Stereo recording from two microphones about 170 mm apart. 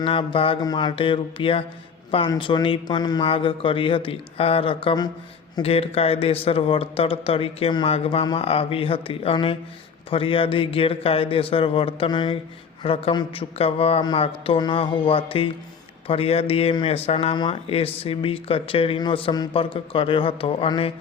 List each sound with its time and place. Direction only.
0.0 s speech: 30° left (ahead or behind)